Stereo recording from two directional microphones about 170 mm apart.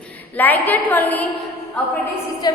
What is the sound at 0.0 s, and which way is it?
A woman's voice, 10° left (ahead or behind).